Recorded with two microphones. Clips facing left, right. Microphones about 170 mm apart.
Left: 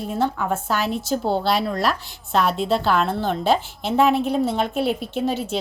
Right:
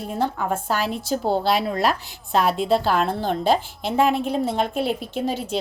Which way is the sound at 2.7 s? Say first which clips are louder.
Even; 40° right (ahead or behind).